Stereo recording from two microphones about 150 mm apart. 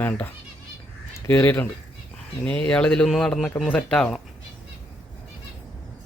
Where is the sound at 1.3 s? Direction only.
15° left (ahead or behind).